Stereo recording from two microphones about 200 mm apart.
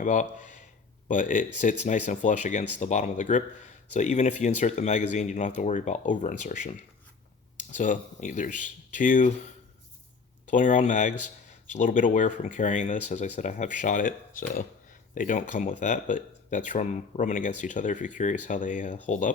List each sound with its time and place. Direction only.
0.0 s speech: 40° left (ahead or behind)
10.5 s speech: 40° left (ahead or behind)